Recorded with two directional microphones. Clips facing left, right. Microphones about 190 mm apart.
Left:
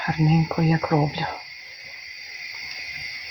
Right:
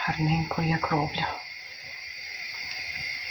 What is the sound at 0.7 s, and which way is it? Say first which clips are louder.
Speech: left 5 dB; 40° left (ahead or behind).